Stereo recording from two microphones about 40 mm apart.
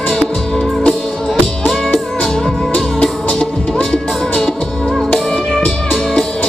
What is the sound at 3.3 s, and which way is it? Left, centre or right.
Music, centre.